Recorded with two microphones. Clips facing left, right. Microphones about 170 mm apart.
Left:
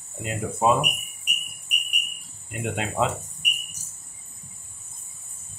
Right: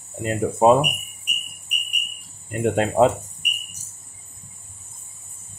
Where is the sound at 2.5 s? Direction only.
45° right (ahead or behind).